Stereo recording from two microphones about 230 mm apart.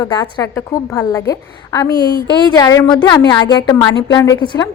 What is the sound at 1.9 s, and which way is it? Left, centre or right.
Speech, centre.